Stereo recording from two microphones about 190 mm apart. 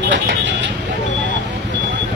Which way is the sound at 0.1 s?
70° right (ahead or behind).